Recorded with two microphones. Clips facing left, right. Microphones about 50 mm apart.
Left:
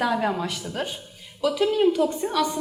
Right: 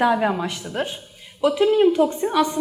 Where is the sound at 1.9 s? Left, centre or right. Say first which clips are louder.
Right 3 dB; right.